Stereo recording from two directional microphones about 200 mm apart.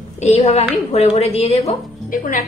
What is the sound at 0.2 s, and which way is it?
A woman's voice, 30° left (ahead or behind).